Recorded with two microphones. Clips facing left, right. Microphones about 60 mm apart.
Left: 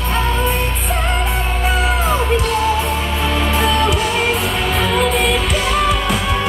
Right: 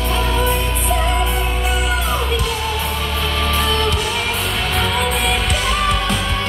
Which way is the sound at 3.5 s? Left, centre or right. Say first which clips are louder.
Left 3 dB; centre.